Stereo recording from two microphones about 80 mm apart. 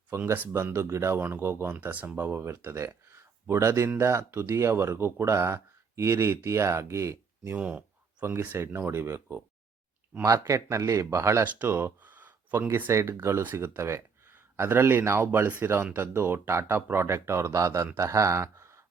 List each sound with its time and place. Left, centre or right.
0.1 s speech: right
1.1 s speech: right
7.5 s speech: centre; by 9.4 s right
10.2 s speech: right; by 16.0 s centre
16.1 s speech: right